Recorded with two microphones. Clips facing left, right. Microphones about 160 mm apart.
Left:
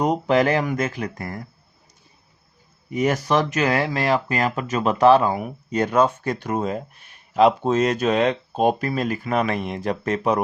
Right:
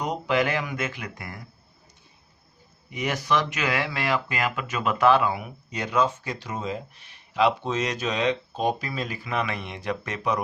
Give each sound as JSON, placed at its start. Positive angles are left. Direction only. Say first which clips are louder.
{"t": 0.0, "sound": "speech", "louder": "left 6 dB", "side_deg": 40}
{"t": 2.9, "sound": "speech", "louder": "left 5 dB", "side_deg": 45}